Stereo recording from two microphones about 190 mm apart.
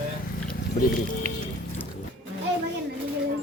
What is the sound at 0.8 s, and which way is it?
Speech, 45° left (ahead or behind).